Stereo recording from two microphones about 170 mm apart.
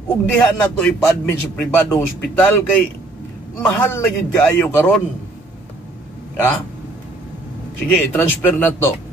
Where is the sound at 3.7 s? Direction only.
15° left (ahead or behind).